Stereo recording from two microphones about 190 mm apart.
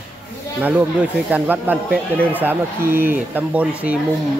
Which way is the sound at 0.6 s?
10° right (ahead or behind).